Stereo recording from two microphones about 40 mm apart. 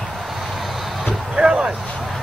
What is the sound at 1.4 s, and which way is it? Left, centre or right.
Speech, right.